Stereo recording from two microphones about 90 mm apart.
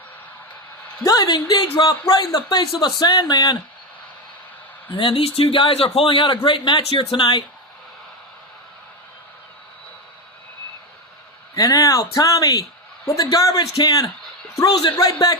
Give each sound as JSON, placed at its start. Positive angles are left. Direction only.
{"t": 1.0, "sound": "speech", "side_deg": 40}
{"t": 1.3, "sound": "speech", "side_deg": 55}
{"t": 4.9, "sound": "a man's voice", "side_deg": 70}
{"t": 11.5, "sound": "speech", "side_deg": 40}